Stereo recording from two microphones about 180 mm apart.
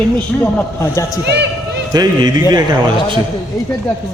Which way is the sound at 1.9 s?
20° right (ahead or behind).